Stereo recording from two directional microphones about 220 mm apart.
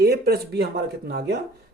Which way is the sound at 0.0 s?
45° right (ahead or behind).